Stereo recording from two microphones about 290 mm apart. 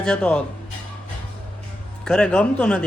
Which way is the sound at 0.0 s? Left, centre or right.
Centre.